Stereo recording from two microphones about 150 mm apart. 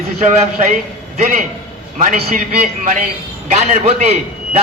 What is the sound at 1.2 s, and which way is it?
Speech, 60° right (ahead or behind).